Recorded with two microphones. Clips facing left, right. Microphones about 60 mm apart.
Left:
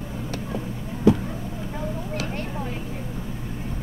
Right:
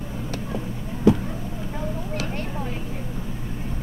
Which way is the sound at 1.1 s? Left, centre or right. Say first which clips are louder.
Even; right.